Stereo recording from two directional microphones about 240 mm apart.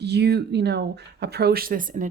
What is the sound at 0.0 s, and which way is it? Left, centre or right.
Speech, right.